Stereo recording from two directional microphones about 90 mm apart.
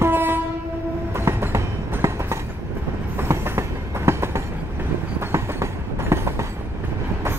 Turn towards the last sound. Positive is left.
turn(degrees=-30)  # may be behind; listen again after turning